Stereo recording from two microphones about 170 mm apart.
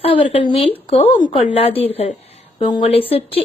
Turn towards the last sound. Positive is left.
turn(degrees=35)  # may be behind; listen again after turning